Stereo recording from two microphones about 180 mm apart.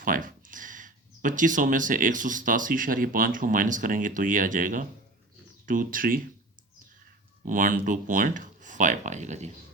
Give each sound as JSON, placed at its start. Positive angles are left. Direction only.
{"t": 0.0, "sound": "speech", "side_deg": -50}
{"t": 7.4, "sound": "speech", "side_deg": -45}